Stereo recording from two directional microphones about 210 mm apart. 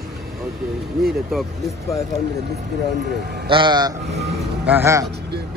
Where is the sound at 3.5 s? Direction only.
20° right (ahead or behind).